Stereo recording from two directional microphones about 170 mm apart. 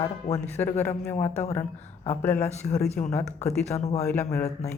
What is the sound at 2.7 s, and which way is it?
Speech, 40° left (ahead or behind).